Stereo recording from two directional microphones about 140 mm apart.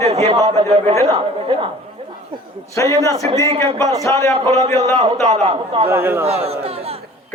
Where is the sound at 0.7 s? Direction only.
40° right (ahead or behind).